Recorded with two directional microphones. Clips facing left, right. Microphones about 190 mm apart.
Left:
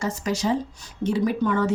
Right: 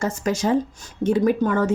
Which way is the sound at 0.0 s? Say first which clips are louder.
Right 3 dB; 50° right (ahead or behind).